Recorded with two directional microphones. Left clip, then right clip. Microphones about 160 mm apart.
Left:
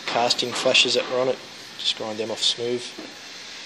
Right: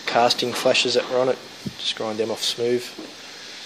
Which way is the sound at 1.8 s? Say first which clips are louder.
Right 1 dB; 30° right (ahead or behind).